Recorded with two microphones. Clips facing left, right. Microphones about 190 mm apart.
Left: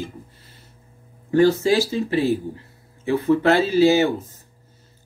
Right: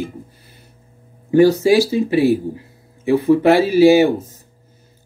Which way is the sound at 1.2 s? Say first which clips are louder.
Right 4 dB; 15° right (ahead or behind).